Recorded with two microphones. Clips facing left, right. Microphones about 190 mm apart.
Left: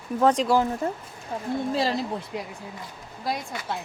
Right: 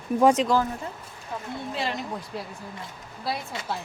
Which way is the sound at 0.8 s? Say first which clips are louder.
Left 8 dB; 45° left (ahead or behind).